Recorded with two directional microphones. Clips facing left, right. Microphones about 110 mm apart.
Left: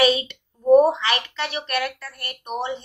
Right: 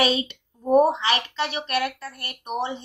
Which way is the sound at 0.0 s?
25° right (ahead or behind).